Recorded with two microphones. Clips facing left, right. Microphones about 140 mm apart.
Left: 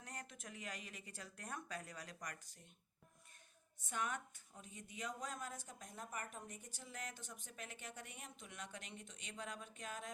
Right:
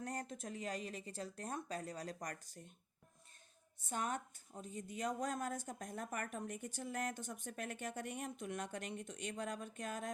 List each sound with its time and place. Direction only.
0.0 s speech: 40° right (ahead or behind)
3.8 s speech: 35° right (ahead or behind)